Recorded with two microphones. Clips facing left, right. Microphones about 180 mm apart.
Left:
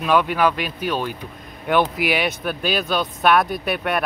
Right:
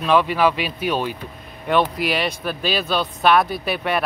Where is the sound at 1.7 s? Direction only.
5° left (ahead or behind).